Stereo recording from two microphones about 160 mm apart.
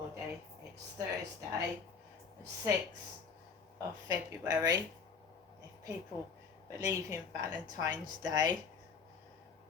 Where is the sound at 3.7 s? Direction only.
25° right (ahead or behind).